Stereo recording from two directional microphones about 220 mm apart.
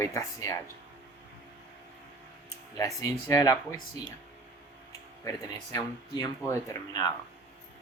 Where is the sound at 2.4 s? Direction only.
15° left (ahead or behind).